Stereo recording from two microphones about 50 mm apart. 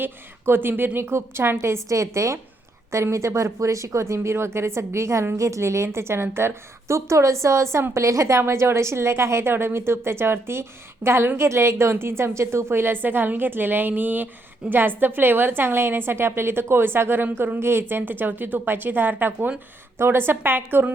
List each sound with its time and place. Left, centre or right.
0.0 s a woman's voice: right
0.9 s speech: right
2.9 s speech: right
5.4 s a woman's voice: right
8.4 s a woman's voice: right